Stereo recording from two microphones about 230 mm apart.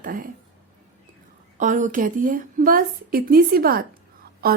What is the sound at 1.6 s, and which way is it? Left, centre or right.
A woman's voice, right.